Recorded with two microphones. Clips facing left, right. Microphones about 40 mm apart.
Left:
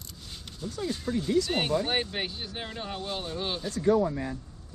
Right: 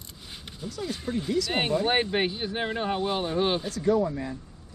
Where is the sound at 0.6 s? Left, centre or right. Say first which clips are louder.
Left 1 dB; centre.